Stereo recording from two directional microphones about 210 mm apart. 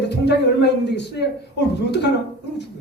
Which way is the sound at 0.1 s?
55° left (ahead or behind).